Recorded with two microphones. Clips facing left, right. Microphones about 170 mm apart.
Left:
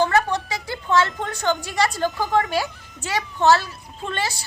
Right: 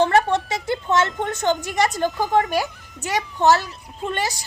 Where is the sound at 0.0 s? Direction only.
25° right (ahead or behind).